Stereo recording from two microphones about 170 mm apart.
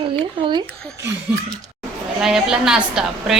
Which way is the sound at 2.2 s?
5° right (ahead or behind).